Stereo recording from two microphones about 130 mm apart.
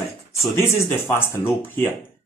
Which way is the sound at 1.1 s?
20° left (ahead or behind).